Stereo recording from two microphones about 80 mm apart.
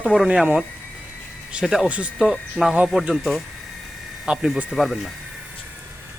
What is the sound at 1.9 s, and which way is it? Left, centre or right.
Speech, centre.